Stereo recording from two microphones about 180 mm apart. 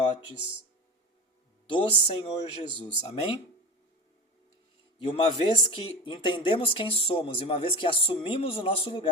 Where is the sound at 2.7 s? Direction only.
25° right (ahead or behind).